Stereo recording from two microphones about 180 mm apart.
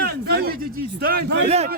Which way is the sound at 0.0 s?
60° right (ahead or behind).